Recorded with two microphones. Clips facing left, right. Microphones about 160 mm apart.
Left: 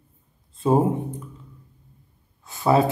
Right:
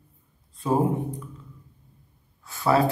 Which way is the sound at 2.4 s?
20° left (ahead or behind).